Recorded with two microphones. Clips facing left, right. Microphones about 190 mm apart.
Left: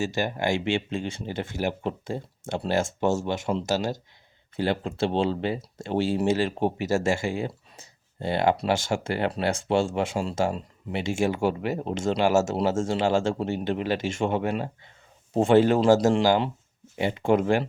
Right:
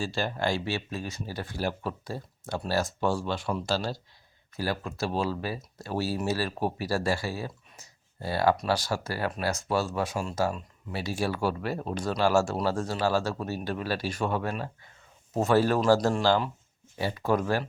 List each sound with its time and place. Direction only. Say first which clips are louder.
0.0 s speech: left 3 dB; 20° left (ahead or behind)